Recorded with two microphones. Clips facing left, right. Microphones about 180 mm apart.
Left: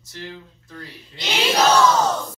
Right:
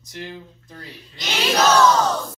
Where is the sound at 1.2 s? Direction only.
30° left (ahead or behind).